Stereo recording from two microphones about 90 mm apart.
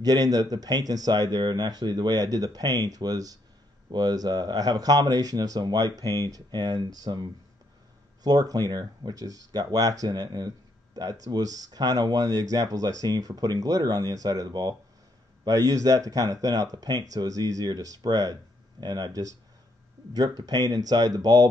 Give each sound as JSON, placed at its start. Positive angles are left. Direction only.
{"t": 0.0, "sound": "speech", "side_deg": -45}